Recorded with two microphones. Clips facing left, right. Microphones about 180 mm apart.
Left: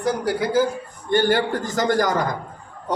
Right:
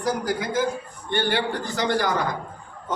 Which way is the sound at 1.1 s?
45° left (ahead or behind).